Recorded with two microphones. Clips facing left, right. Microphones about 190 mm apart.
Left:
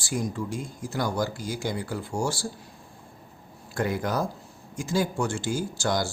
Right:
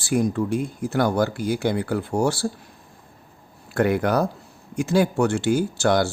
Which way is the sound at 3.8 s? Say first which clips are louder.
Right 7 dB; 65° right (ahead or behind).